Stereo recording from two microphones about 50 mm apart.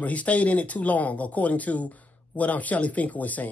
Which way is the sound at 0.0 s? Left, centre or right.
Left.